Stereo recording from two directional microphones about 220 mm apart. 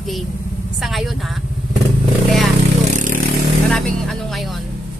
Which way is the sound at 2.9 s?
35° right (ahead or behind).